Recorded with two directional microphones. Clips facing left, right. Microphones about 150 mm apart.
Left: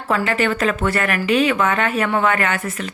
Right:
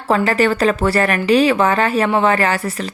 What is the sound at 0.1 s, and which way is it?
Speech, 35° right (ahead or behind).